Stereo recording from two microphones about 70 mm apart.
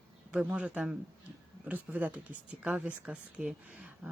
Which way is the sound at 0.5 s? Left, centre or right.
Centre.